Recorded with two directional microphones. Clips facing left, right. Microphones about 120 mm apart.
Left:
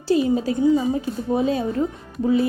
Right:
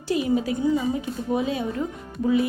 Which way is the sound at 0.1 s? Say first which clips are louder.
Left 4 dB; 30° left (ahead or behind).